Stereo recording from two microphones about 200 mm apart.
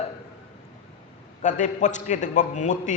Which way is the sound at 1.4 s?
40° left (ahead or behind).